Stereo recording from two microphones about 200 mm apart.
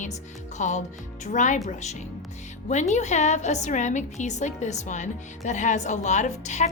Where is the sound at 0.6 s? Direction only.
40° left (ahead or behind).